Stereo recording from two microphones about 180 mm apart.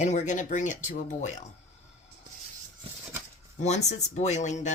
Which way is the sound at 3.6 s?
40° left (ahead or behind).